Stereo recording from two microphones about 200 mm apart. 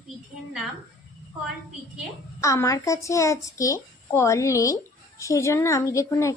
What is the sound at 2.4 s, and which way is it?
Speech, 15° left (ahead or behind).